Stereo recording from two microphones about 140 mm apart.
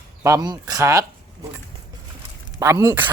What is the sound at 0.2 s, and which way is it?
Speech, 25° right (ahead or behind).